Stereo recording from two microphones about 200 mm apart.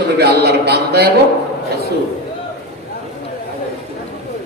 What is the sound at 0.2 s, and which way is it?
Speech, 55° right (ahead or behind).